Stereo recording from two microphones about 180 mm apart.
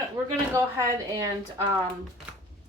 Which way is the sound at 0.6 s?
15° right (ahead or behind).